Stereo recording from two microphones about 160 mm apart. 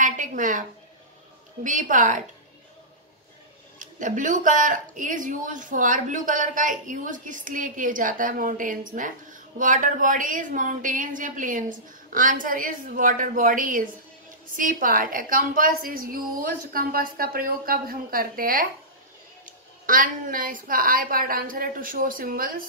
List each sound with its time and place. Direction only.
0.0 s a woman's voice: 55° right (ahead or behind)
3.8 s speech: 55° right (ahead or behind)